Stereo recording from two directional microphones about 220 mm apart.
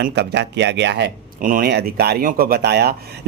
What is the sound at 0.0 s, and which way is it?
Speech, 50° right (ahead or behind).